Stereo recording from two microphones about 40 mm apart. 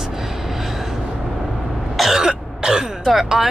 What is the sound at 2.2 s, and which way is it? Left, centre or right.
Throat clearing, centre.